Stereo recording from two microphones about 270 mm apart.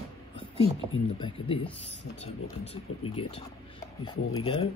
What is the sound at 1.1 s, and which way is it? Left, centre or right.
Speech, centre.